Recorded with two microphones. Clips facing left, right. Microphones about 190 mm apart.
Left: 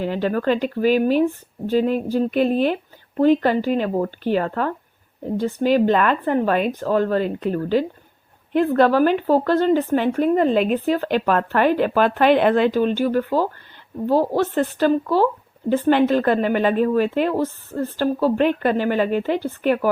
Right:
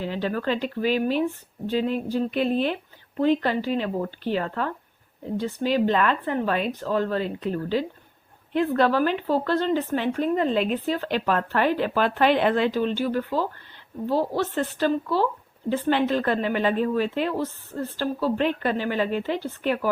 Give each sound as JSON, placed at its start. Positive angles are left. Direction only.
{"t": 0.0, "sound": "speech", "side_deg": 55}